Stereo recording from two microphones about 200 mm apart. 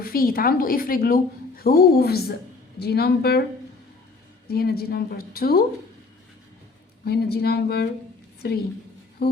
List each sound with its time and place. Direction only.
0.0 s a woman's voice: 45° left (ahead or behind)
4.4 s a woman's voice: 50° left (ahead or behind)
7.0 s a woman's voice: 50° left (ahead or behind)
9.2 s music: 50° left (ahead or behind)